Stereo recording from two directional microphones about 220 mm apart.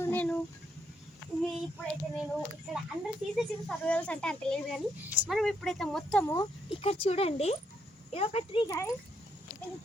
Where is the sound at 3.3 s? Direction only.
Centre (ahead or behind).